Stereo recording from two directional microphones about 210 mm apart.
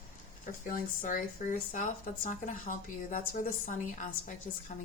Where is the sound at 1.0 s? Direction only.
40° left (ahead or behind).